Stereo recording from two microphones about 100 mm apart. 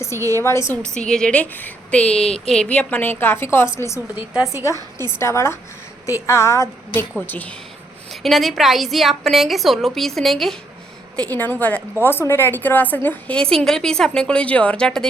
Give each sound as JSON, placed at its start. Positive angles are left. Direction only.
{"t": 0.3, "sound": "a woman's voice", "side_deg": 25}
{"t": 0.9, "sound": "a woman's voice", "side_deg": 5}
{"t": 5.2, "sound": "a woman's voice", "side_deg": 25}
{"t": 7.2, "sound": "a woman's voice", "side_deg": 15}
{"t": 8.2, "sound": "a woman's voice", "side_deg": 0}
{"t": 11.2, "sound": "a woman's voice", "side_deg": 15}